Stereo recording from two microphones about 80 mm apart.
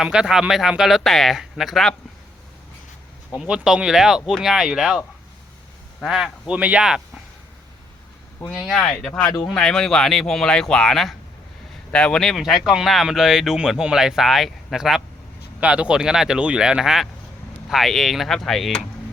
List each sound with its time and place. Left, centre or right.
0.0 s speech: centre
3.4 s speech: centre
8.8 s speech: centre